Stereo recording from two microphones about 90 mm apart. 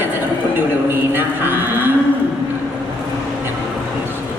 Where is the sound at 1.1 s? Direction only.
20° right (ahead or behind).